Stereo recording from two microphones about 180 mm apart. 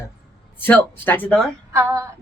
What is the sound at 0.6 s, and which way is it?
Speech, 10° left (ahead or behind).